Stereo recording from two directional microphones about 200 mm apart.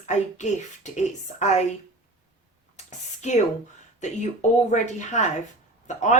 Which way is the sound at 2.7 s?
35° left (ahead or behind).